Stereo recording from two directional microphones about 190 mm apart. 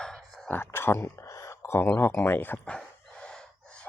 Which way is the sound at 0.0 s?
Centre (ahead or behind).